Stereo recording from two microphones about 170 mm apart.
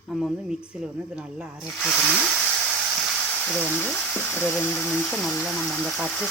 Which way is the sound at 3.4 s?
10° left (ahead or behind).